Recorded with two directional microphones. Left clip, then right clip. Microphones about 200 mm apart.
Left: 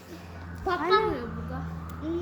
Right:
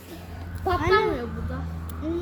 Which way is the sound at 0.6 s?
45° right (ahead or behind).